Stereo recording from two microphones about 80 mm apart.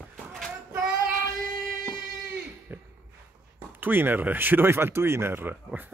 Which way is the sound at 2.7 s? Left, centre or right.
Right.